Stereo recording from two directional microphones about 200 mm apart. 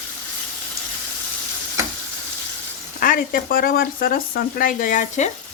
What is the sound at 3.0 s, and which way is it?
Speech, 45° left (ahead or behind).